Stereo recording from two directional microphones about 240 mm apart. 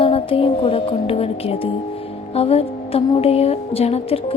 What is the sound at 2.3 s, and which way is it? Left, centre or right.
Music, left.